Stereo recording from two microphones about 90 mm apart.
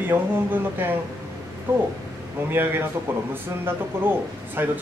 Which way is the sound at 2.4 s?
25° right (ahead or behind).